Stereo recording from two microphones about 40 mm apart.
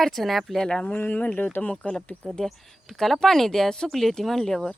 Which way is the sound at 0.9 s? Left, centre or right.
Left.